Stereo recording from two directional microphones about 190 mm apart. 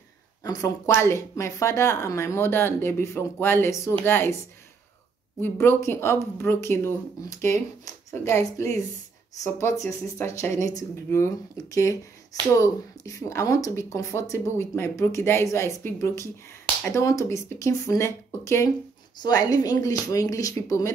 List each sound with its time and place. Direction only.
0.4 s speech: 15° left (ahead or behind)
5.4 s speech: 15° left (ahead or behind)